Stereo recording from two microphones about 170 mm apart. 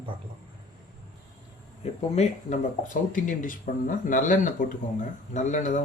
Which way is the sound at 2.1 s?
40° left (ahead or behind).